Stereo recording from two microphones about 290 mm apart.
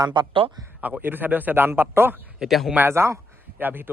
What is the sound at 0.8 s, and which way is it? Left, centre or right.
A man's voice, centre.